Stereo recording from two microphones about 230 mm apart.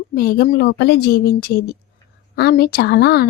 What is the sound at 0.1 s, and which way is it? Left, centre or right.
Speech, left.